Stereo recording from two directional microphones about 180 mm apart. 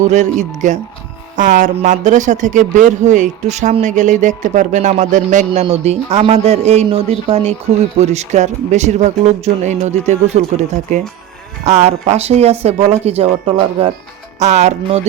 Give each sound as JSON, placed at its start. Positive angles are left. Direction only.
{"t": 0.0, "sound": "speech", "side_deg": -40}